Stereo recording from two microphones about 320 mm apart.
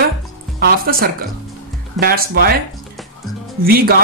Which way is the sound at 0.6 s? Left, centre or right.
Right.